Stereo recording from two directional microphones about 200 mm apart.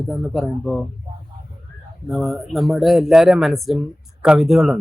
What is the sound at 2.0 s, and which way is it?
Speech, centre (ahead or behind).